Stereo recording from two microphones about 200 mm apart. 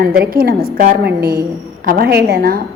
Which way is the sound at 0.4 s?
50° right (ahead or behind).